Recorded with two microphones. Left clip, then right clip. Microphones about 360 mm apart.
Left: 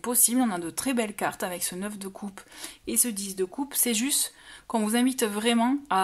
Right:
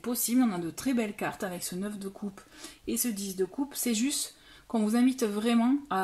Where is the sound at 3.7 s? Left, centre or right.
Left.